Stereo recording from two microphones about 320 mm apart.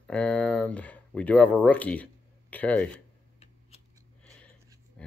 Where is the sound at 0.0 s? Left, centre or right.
Centre.